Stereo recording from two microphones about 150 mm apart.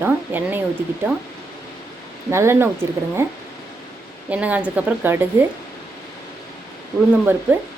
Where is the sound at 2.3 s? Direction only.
15° right (ahead or behind).